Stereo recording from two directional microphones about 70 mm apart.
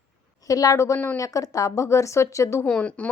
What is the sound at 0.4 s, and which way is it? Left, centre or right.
Speech, left.